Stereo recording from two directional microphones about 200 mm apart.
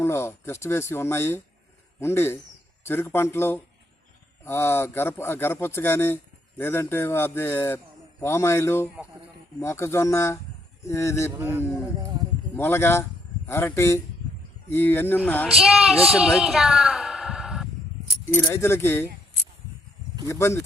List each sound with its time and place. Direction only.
0.0 s speech: 10° left (ahead or behind)
11.3 s a man's voice: 10° right (ahead or behind)
12.5 s speech: 10° left (ahead or behind)
15.4 s a woman's voice: centre (ahead or behind)
18.3 s speech: 10° left (ahead or behind)
20.2 s speech: 15° left (ahead or behind)